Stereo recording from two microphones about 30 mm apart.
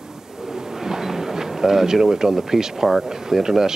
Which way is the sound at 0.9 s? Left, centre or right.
Centre.